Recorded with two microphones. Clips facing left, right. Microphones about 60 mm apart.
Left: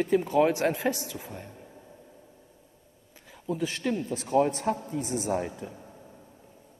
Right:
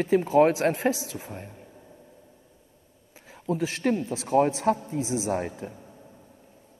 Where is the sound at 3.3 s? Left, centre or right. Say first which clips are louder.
Right 3 dB; right.